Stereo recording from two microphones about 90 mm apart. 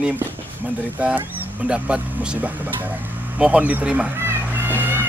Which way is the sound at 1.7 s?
10° right (ahead or behind).